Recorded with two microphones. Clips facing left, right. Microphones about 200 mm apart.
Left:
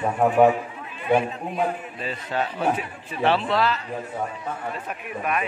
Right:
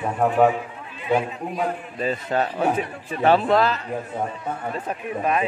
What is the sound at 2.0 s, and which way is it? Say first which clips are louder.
A man's voice: right 5 dB; 45° right (ahead or behind).